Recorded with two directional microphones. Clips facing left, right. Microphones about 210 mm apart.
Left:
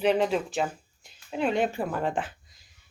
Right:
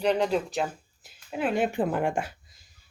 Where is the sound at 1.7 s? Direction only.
20° right (ahead or behind).